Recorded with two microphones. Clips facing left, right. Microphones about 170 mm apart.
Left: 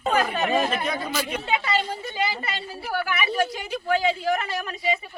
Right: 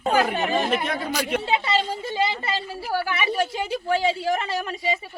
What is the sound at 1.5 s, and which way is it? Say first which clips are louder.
A woman's voice: right 2 dB; 25° right (ahead or behind).